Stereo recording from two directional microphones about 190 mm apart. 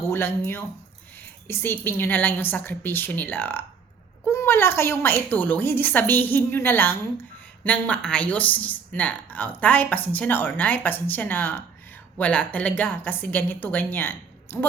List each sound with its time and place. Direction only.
0.0 s speech: 10° left (ahead or behind)